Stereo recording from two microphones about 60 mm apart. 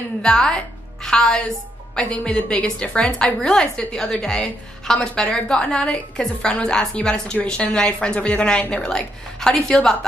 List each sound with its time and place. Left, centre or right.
0.2 s a woman's voice: centre